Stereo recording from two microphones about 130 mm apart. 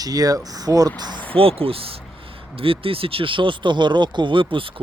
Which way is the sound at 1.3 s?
45° right (ahead or behind).